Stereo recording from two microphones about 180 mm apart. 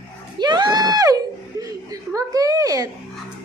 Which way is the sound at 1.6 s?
20° right (ahead or behind).